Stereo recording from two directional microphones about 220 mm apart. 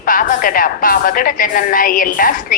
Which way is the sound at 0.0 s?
40° left (ahead or behind).